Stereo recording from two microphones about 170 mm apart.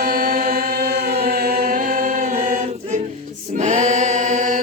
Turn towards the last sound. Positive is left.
turn(degrees=-45)  # may be behind; listen again after turning